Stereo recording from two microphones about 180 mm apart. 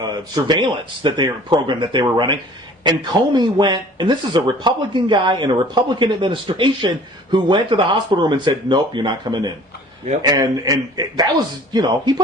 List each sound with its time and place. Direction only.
0.0 s a man's voice: 20° right (ahead or behind)